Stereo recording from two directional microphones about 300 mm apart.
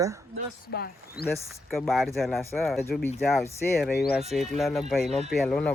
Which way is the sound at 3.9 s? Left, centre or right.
Left.